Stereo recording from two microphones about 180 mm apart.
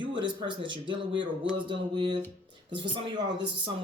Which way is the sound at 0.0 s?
25° right (ahead or behind).